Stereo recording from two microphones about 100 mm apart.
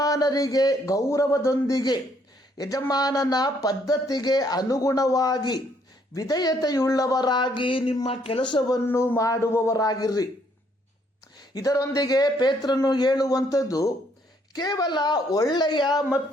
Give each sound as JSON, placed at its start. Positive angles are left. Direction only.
{"t": 0.0, "sound": "a man's voice", "side_deg": 35}
{"t": 8.9, "sound": "speech", "side_deg": 30}
{"t": 11.5, "sound": "a man's voice", "side_deg": 35}